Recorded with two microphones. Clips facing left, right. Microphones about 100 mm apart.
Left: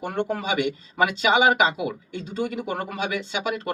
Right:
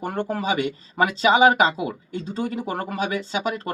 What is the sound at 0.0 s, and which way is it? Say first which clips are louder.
Speech: right 1 dB; 35° right (ahead or behind).